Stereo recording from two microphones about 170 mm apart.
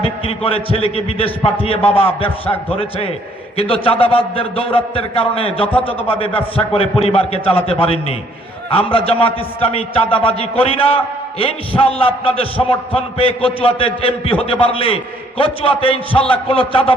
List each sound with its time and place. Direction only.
0.0 s a man's voice: 35° left (ahead or behind)